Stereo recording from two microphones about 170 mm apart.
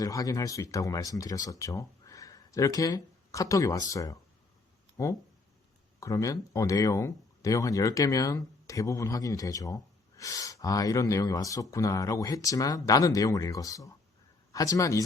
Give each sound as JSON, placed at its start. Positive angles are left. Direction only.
{"t": 0.0, "sound": "speech", "side_deg": 20}
{"t": 6.0, "sound": "speech", "side_deg": 20}